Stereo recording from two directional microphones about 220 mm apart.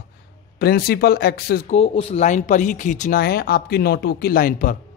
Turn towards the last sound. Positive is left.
turn(degrees=40)  # may be behind; listen again after turning